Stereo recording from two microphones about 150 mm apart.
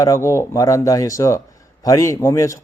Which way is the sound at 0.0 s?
20° left (ahead or behind).